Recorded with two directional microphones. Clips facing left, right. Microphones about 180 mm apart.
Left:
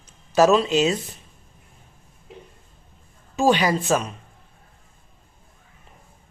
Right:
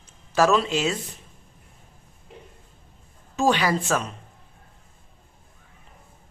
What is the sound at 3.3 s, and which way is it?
Speech, 15° left (ahead or behind).